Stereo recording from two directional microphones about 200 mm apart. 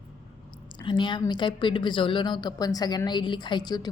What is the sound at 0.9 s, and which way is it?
A woman's voice, 25° left (ahead or behind).